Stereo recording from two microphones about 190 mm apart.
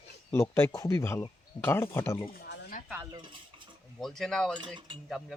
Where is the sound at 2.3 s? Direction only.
50° left (ahead or behind).